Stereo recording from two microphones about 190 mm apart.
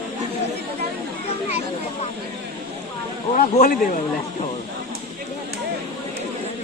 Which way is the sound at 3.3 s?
50° left (ahead or behind).